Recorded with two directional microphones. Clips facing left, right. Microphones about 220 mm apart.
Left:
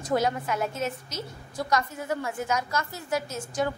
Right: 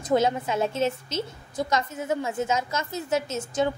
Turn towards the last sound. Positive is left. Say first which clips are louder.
# right 3 dB
turn(degrees=-25)  # may be behind; listen again after turning